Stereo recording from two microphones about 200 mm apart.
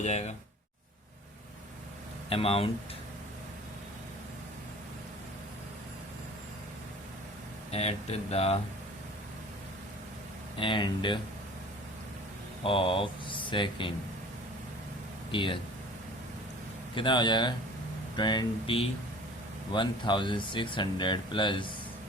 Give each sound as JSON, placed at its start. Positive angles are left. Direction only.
{"t": 0.0, "sound": "speech", "side_deg": 35}
{"t": 2.3, "sound": "speech", "side_deg": 30}
{"t": 7.7, "sound": "speech", "side_deg": 30}
{"t": 10.6, "sound": "speech", "side_deg": 25}
{"t": 12.6, "sound": "speech", "side_deg": 25}
{"t": 15.3, "sound": "speech", "side_deg": 25}
{"t": 16.9, "sound": "speech", "side_deg": 25}